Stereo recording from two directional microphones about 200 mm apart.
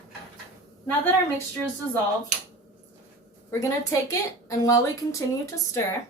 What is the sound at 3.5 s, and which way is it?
A woman's voice, 15° left (ahead or behind).